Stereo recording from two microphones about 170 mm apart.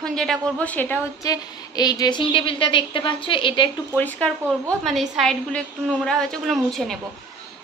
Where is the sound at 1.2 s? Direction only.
25° left (ahead or behind).